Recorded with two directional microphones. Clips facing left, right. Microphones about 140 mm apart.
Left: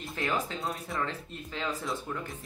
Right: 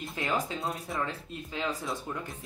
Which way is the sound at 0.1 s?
20° right (ahead or behind).